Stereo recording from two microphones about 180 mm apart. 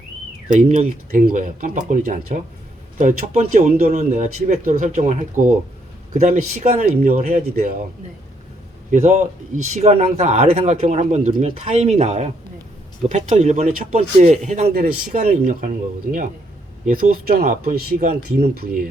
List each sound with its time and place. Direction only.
0.5 s speech: 45° right (ahead or behind)
7.0 s speech: 50° right (ahead or behind)
8.9 s speech: 40° right (ahead or behind)
16.8 s speech: 50° right (ahead or behind)